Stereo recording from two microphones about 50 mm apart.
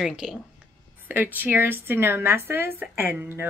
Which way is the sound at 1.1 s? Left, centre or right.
Right.